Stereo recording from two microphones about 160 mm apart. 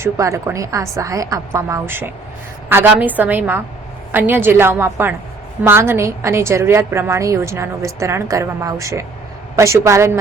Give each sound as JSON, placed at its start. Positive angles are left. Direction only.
{"t": 0.0, "sound": "a woman's voice", "side_deg": -20}